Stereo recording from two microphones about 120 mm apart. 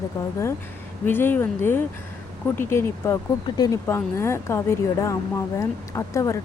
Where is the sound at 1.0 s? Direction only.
15° left (ahead or behind).